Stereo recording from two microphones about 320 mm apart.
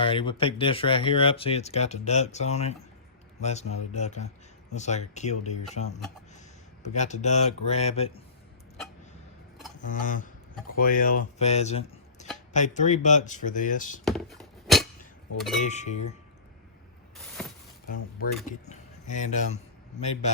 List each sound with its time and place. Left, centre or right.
0.0 s speech: centre
6.9 s speech: left
9.9 s speech: left
14.0 s a sound: centre
15.4 s speech: centre
15.6 s speech: left
17.4 s a sound: centre
18.4 s speech: left